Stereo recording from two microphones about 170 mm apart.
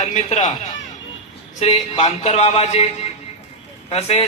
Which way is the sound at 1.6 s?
45° left (ahead or behind).